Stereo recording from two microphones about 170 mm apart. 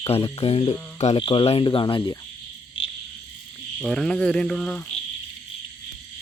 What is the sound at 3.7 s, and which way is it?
Cricket, 5° left (ahead or behind).